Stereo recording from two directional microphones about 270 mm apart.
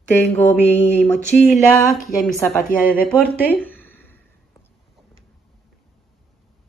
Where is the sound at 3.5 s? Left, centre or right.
Centre.